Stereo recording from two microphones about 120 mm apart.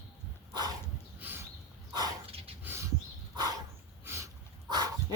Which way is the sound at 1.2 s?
15° right (ahead or behind).